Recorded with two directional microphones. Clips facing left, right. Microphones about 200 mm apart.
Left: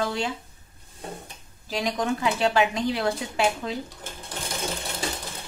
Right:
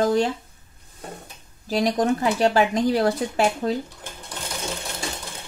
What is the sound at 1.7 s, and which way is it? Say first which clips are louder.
Speech: right 6 dB; 40° right (ahead or behind).